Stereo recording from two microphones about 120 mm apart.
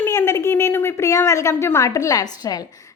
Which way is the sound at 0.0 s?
25° left (ahead or behind).